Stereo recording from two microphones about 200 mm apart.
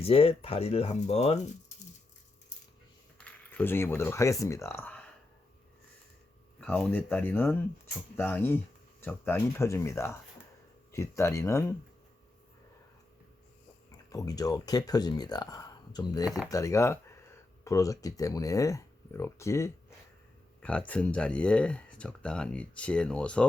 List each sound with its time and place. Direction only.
0.0 s speech: 30° left (ahead or behind)
3.5 s speech: 10° left (ahead or behind)
6.6 s speech: 5° left (ahead or behind)
14.1 s speech: 20° left (ahead or behind)
16.2 s speech: centre (ahead or behind)
16.5 s speech: 15° left (ahead or behind)